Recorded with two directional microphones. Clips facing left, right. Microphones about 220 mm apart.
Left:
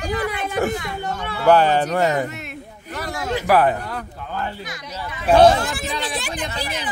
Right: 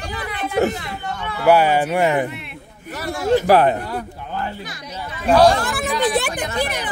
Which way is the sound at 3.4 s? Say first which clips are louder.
Left 1 dB; 25° right (ahead or behind).